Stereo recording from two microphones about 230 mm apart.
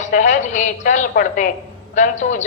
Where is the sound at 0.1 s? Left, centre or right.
Left.